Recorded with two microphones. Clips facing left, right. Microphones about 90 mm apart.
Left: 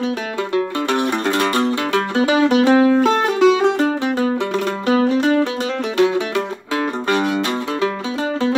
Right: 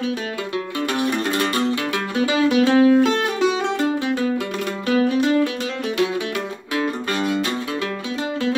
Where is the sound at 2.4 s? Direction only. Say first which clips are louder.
Left 1 dB; 50° left (ahead or behind).